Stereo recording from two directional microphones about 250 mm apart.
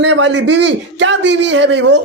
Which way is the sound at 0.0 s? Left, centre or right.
Right.